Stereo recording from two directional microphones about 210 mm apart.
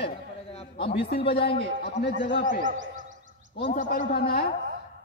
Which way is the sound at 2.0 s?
55° left (ahead or behind).